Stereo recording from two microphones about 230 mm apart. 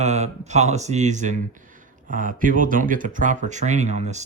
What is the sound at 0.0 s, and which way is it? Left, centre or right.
Speech, right.